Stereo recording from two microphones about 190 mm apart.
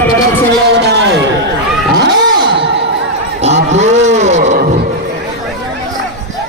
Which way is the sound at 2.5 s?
60° right (ahead or behind).